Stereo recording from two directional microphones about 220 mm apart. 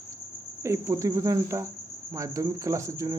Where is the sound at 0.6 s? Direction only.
15° right (ahead or behind).